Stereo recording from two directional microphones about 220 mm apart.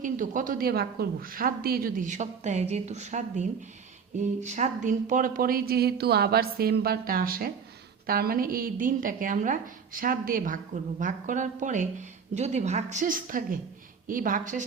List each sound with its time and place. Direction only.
0.0 s speech: 35° right (ahead or behind)